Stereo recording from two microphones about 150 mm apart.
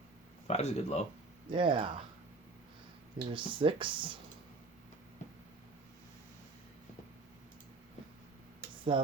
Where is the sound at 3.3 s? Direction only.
35° right (ahead or behind).